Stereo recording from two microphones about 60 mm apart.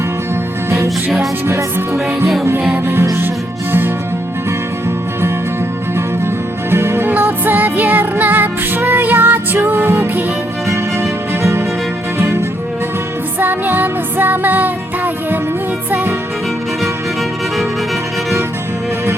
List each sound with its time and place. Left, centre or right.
1.5 s music: right
2.7 s music: right
6.7 s music: right
7.1 s music: right
9.7 s music: right
12.1 s music: right
13.4 s music: right